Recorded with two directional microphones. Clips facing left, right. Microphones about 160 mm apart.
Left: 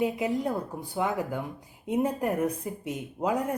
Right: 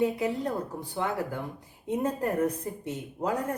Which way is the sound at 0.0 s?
15° left (ahead or behind).